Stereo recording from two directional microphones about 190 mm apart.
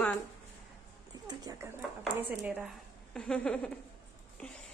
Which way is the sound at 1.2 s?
20° right (ahead or behind).